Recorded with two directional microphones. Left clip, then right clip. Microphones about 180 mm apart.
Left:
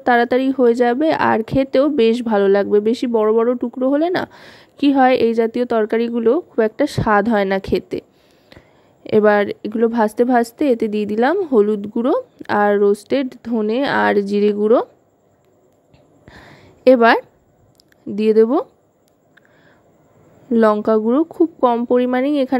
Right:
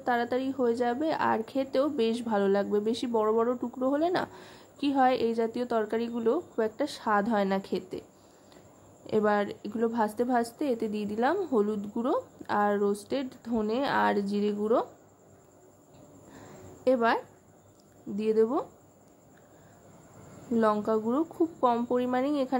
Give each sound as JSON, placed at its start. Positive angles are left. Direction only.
{"t": 0.0, "sound": "speech", "side_deg": 40}
{"t": 9.0, "sound": "speech", "side_deg": 40}
{"t": 16.3, "sound": "a sound", "side_deg": 50}
{"t": 18.1, "sound": "speech", "side_deg": 45}
{"t": 20.8, "sound": "speech", "side_deg": 40}